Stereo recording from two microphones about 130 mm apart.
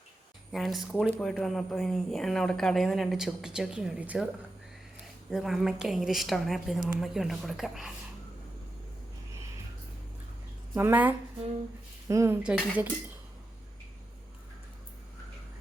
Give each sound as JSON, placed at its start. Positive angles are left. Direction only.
{"t": 0.5, "sound": "speech", "side_deg": 0}
{"t": 5.3, "sound": "speech", "side_deg": 0}
{"t": 10.8, "sound": "cutlery", "side_deg": -15}
{"t": 12.0, "sound": "speech", "side_deg": -25}
{"t": 12.4, "sound": "cutlery", "side_deg": -10}